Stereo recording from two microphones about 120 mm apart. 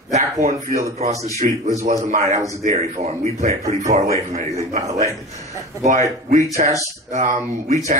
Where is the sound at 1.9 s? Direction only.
80° right.